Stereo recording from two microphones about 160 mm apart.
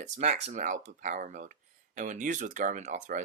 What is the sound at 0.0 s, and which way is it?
Speech, 45° right (ahead or behind).